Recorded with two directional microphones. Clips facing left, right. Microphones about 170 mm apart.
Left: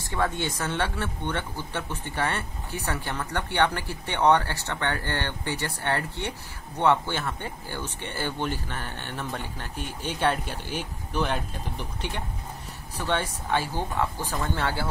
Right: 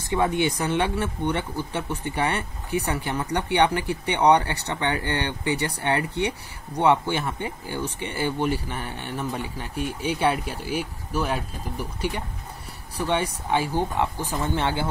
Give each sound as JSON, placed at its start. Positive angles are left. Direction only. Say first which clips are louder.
{"t": 0.0, "sound": "speech", "louder": "right 5 dB", "side_deg": -15}